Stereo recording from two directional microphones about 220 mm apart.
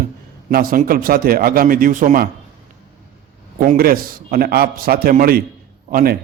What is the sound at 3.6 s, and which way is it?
A man's voice, 40° right (ahead or behind).